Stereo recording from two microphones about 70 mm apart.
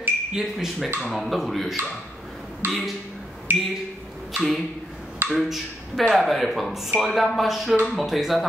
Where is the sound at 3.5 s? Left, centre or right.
Right.